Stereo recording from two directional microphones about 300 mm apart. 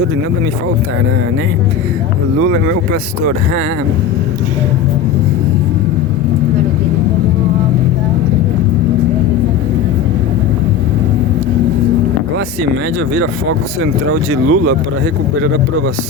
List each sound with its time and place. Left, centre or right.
2.4 s speech: right
14.1 s speech: right